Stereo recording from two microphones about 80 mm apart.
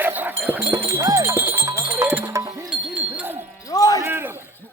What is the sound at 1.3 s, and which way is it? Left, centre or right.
Music, right.